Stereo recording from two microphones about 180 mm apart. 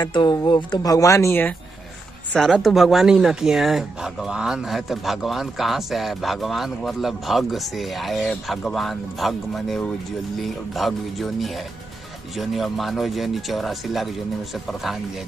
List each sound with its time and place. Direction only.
0.0 s speech: 25° left (ahead or behind)
2.3 s speech: centre (ahead or behind)